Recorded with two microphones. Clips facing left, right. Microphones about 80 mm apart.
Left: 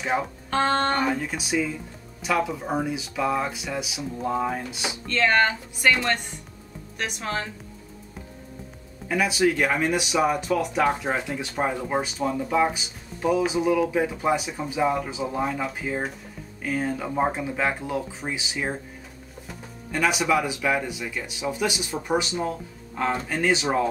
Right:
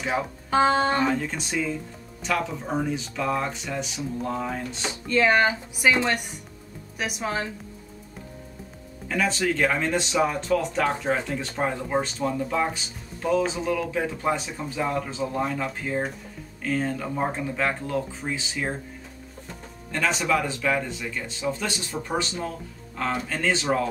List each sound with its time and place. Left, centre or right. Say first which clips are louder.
0.1 s speech: right 1 dB; centre
1.0 s speech: right 1 dB; centre
5.0 s speech: right 1 dB; centre
9.1 s speech: left 3 dB; centre
19.9 s speech: left 2 dB; centre